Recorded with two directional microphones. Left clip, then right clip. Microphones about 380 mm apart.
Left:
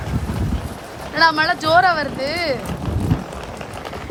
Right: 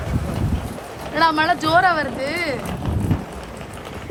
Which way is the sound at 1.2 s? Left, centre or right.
Centre.